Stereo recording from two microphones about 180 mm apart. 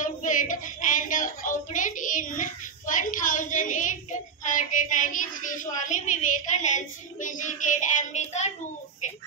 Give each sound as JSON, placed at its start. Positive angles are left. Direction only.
{"t": 0.0, "sound": "child singing", "side_deg": 45}